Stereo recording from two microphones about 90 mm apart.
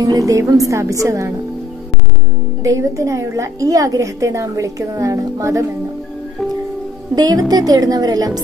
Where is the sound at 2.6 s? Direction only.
35° right (ahead or behind).